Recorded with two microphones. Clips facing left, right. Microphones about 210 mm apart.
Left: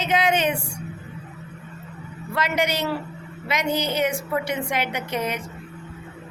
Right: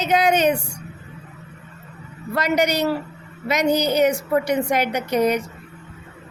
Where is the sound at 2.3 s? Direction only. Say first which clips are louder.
Right 4 dB; 40° right (ahead or behind).